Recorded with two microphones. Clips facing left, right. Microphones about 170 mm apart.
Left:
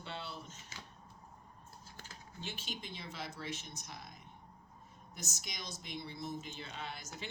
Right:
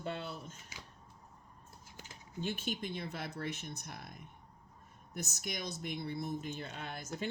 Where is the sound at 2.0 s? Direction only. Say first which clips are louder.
Right 6 dB; 20° right (ahead or behind).